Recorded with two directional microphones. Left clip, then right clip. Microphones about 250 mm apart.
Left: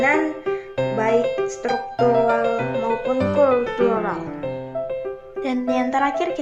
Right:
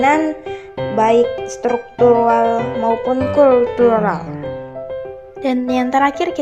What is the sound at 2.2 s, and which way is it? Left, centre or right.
Speech, right.